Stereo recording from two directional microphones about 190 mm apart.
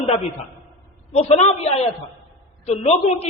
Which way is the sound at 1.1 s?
35° left (ahead or behind).